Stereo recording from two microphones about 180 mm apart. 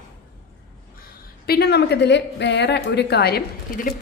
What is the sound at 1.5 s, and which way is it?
A woman's voice, 65° left (ahead or behind).